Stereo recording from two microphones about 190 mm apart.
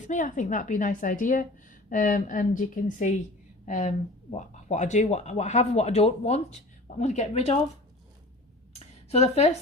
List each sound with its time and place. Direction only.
0.1 s a woman's voice: 40° left (ahead or behind)
9.0 s speech: 35° left (ahead or behind)